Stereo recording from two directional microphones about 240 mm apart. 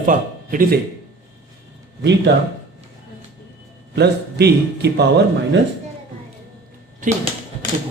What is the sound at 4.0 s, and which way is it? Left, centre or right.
A man's voice, right.